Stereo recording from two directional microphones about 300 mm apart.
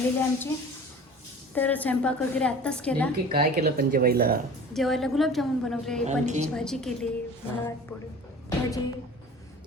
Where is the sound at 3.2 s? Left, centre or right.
Centre.